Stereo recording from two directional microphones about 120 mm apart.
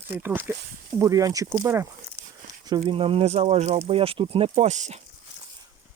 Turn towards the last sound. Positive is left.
turn(degrees=-70)  # may be behind; listen again after turning